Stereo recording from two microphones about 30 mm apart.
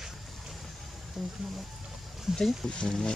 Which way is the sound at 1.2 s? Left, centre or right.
Centre.